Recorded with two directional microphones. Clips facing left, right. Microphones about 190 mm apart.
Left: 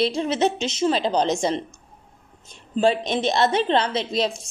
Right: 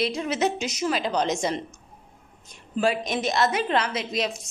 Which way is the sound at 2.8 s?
30° left (ahead or behind).